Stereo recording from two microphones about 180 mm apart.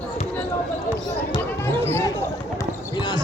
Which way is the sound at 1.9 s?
15° left (ahead or behind).